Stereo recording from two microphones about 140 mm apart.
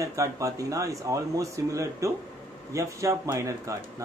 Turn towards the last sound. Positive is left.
turn(degrees=-20)  # may be behind; listen again after turning